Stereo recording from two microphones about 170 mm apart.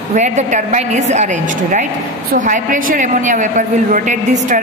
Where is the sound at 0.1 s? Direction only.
45° right (ahead or behind).